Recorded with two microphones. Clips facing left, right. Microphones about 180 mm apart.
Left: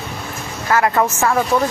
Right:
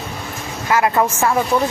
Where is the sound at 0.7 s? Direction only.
10° right (ahead or behind).